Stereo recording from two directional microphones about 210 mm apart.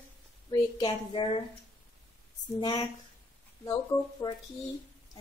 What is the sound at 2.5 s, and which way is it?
Speech, 20° left (ahead or behind).